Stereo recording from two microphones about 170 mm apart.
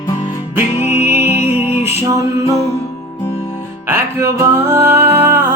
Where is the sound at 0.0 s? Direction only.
20° left (ahead or behind).